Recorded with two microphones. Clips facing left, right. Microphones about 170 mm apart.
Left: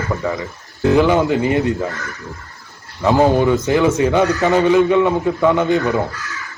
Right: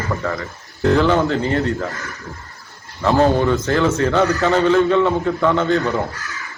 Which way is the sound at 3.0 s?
15° left (ahead or behind).